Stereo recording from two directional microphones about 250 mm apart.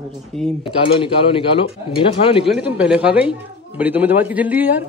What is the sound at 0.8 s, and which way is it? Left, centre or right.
Speech, left.